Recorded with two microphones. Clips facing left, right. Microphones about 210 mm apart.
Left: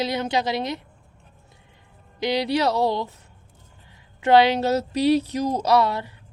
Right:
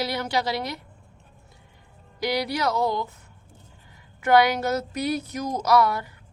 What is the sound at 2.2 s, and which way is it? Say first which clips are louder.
Speech: left 4 dB; 25° left (ahead or behind).